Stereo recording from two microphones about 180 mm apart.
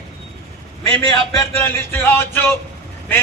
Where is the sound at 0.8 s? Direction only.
20° left (ahead or behind).